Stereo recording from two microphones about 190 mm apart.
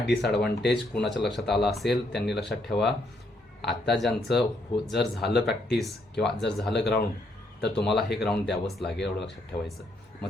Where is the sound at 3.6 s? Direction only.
60° left (ahead or behind).